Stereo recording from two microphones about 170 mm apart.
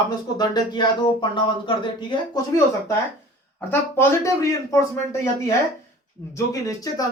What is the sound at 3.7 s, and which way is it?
Speech, 15° left (ahead or behind).